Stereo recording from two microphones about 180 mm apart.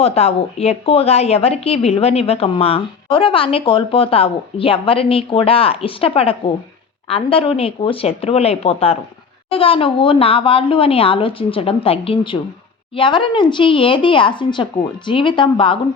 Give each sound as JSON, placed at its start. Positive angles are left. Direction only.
{"t": 0.0, "sound": "a woman's voice", "side_deg": 35}